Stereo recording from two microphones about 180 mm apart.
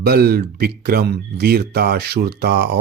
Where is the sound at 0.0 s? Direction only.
60° right (ahead or behind).